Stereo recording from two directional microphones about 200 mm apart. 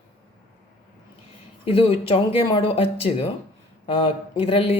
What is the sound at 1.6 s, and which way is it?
Speech, 30° left (ahead or behind).